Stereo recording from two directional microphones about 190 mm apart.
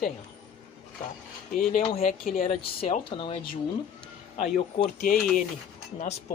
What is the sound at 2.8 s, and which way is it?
Speech, 30° left (ahead or behind).